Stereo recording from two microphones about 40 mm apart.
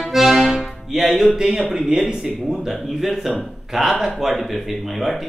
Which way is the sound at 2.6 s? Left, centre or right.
Centre.